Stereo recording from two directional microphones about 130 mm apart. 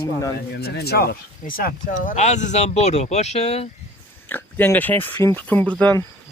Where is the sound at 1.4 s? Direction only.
90° left; by 3.7 s 55° left (ahead or behind).